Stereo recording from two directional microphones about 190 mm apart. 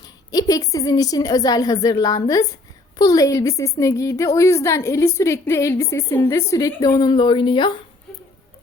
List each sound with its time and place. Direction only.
0.3 s a woman's voice: 20° left (ahead or behind)